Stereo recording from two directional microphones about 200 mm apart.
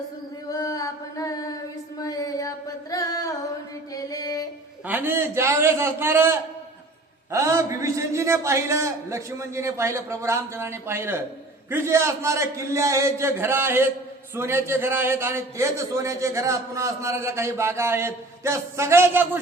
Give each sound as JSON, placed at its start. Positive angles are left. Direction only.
{"t": 0.5, "sound": "chant", "side_deg": 15}
{"t": 2.0, "sound": "a sound", "side_deg": 15}
{"t": 2.9, "sound": "music", "side_deg": 15}
{"t": 3.9, "sound": "mantra", "side_deg": 15}
{"t": 4.9, "sound": "a man's voice", "side_deg": -10}